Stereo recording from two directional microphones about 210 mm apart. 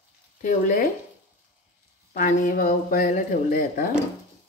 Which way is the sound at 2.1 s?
40° left (ahead or behind).